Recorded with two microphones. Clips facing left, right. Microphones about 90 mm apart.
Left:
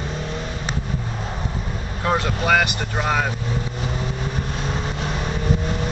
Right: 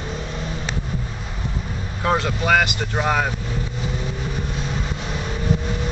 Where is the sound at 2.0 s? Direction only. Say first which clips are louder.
Even; centre (ahead or behind).